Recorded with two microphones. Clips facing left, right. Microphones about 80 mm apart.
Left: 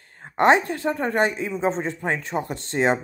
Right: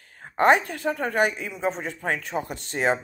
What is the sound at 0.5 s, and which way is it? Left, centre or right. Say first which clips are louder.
Speech: left 2 dB; left.